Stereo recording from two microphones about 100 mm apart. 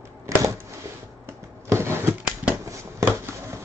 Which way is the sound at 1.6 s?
25° right (ahead or behind).